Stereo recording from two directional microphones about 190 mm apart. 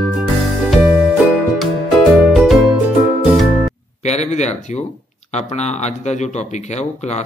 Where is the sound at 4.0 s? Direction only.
35° left (ahead or behind).